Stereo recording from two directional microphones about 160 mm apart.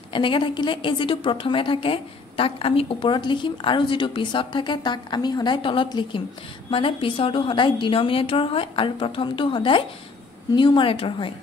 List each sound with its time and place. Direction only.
0.1 s a woman's voice: 30° left (ahead or behind)